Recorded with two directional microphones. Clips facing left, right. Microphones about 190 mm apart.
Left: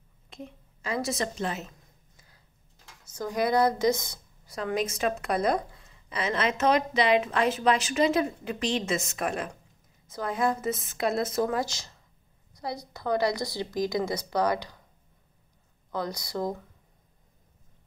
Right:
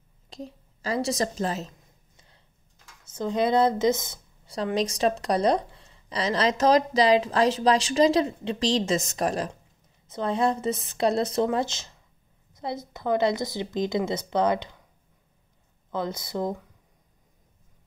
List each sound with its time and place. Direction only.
0.3 s a woman's voice: 35° right (ahead or behind)
2.1 s a sound: 30° right (ahead or behind)
3.1 s a woman's voice: 25° right (ahead or behind)
15.9 s a woman's voice: 20° right (ahead or behind)